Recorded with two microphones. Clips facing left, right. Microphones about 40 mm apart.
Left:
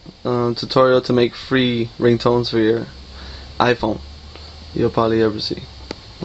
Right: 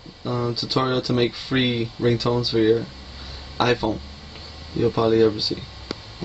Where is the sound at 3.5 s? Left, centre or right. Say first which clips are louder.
Left 4 dB; centre.